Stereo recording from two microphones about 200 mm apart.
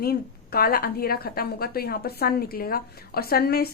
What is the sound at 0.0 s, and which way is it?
A woman's voice, 50° left (ahead or behind).